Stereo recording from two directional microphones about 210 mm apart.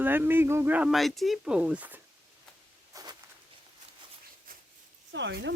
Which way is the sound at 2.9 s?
15° right (ahead or behind).